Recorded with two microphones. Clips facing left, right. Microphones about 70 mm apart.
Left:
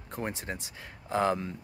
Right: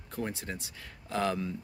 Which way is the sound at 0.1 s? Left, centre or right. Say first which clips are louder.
Left 1 dB; left.